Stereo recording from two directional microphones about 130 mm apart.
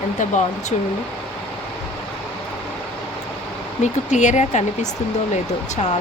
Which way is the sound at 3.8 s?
65° left (ahead or behind).